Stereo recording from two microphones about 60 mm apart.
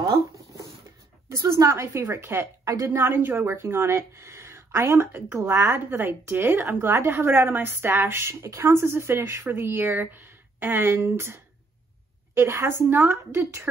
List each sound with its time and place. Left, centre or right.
0.0 s a sound: right
1.3 s a woman's voice: right
2.1 s speech: right